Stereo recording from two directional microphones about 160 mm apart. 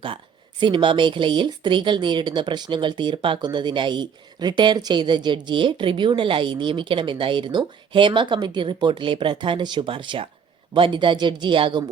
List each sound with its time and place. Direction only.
0.6 s a woman's voice: 30° right (ahead or behind)